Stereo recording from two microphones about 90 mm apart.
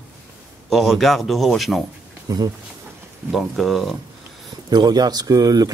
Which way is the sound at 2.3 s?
45° right (ahead or behind).